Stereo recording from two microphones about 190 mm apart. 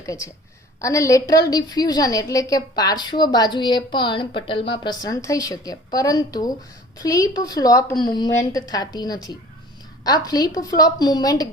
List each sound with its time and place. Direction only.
0.0 s a woman's voice: 15° left (ahead or behind)